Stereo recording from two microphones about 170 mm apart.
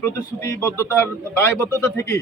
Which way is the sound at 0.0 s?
15° left (ahead or behind).